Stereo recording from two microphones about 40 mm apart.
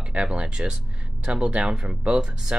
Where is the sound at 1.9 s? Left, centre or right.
Right.